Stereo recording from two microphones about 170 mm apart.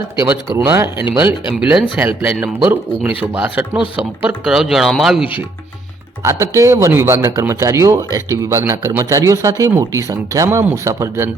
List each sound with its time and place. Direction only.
0.3 s speech: 15° right (ahead or behind)
6.2 s speech: 15° right (ahead or behind)